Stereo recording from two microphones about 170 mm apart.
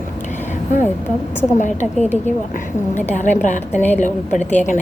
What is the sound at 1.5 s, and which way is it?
A woman's voice, 45° left (ahead or behind).